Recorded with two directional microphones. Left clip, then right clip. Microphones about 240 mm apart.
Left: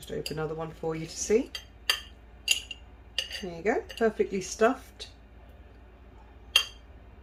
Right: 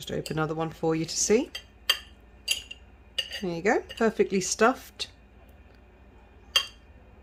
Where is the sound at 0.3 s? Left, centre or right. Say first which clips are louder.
Right 4 dB; right.